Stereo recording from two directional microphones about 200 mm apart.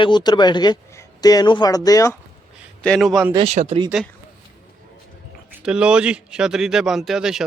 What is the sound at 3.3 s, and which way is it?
Speech, 35° right (ahead or behind).